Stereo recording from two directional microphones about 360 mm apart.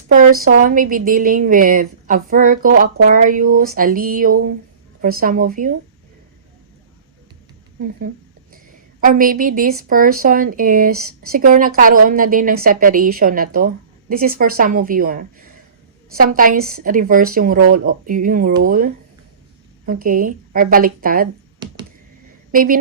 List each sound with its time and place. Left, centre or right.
0.4 s a woman's voice: right
8.5 s a sound: right
9.9 s a woman's voice: right
10.9 s speech: right
11.3 s a woman's voice: right
22.5 s a woman's voice: right